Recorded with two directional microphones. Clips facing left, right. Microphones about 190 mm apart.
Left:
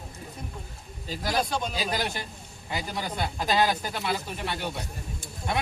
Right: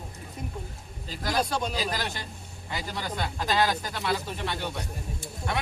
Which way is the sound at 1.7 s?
15° left (ahead or behind).